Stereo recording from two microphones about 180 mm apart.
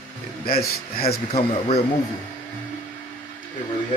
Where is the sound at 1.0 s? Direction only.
30° left (ahead or behind).